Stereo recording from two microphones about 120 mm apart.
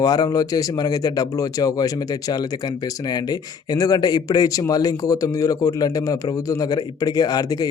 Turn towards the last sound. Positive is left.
turn(degrees=30)  # may be behind; listen again after turning